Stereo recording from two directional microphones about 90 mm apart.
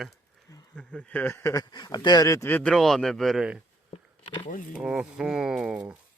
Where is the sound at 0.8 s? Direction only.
10° left (ahead or behind).